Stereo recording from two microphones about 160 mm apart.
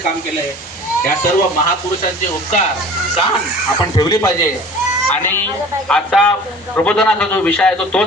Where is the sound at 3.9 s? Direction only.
25° left (ahead or behind).